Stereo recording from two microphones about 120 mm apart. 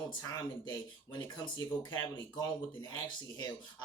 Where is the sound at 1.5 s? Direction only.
35° left (ahead or behind).